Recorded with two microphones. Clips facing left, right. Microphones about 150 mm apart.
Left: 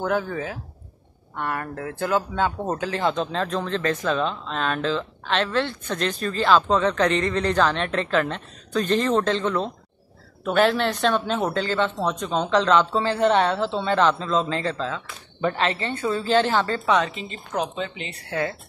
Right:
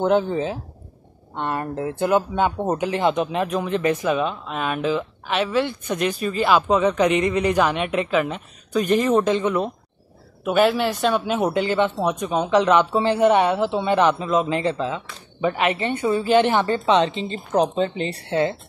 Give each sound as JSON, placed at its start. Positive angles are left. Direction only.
{"t": 0.0, "sound": "speech", "side_deg": -25}
{"t": 18.3, "sound": "speech", "side_deg": -25}